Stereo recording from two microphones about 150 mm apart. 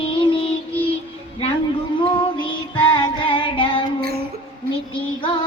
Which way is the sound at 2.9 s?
35° left (ahead or behind).